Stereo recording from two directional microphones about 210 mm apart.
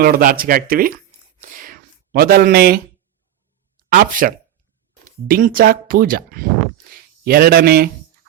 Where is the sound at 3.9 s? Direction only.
40° right (ahead or behind).